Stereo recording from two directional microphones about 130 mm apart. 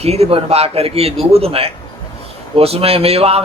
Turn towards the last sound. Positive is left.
turn(degrees=-50)  # may be behind; listen again after turning